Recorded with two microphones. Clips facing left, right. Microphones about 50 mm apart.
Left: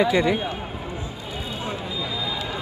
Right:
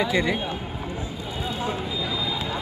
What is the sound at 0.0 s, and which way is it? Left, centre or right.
Speech, centre.